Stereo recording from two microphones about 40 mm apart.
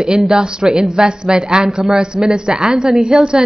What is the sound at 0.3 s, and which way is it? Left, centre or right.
A woman's voice, centre.